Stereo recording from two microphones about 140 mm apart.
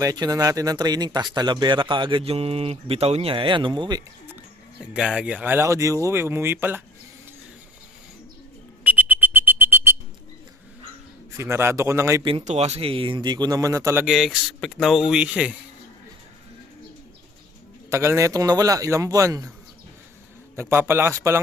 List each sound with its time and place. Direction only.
0.0 s speech: 25° right (ahead or behind)
4.9 s speech: 5° right (ahead or behind)
8.8 s a sound: 10° right (ahead or behind)
11.3 s a man's voice: 20° right (ahead or behind)
12.5 s speech: 50° right (ahead or behind); by 14.0 s 20° right (ahead or behind)
14.0 s speech: centre (ahead or behind)
17.9 s a man's voice: 20° right (ahead or behind)
20.6 s speech: 15° right (ahead or behind)